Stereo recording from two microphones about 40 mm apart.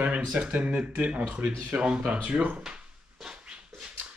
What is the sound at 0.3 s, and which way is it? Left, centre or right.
Speech, right.